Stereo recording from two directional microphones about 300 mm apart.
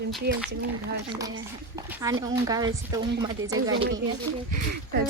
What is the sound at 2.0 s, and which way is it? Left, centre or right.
Speech, centre.